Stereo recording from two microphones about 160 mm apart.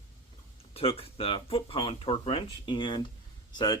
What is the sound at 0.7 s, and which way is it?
Speech, 35° left (ahead or behind).